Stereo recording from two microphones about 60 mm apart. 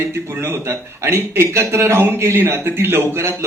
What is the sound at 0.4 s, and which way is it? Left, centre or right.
Speech, right.